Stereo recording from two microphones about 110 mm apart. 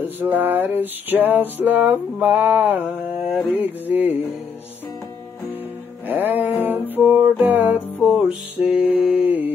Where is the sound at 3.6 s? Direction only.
15° right (ahead or behind).